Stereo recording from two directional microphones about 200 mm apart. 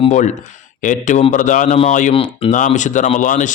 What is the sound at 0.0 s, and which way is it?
A man's voice, 35° left (ahead or behind).